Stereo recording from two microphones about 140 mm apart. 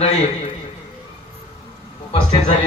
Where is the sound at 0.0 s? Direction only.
45° left (ahead or behind).